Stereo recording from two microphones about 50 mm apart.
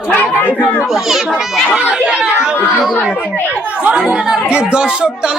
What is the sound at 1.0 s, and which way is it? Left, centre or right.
Speech, centre.